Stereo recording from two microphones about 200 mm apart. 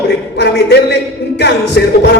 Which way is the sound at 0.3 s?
55° left (ahead or behind).